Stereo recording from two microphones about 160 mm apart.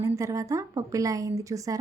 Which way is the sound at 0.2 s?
20° right (ahead or behind).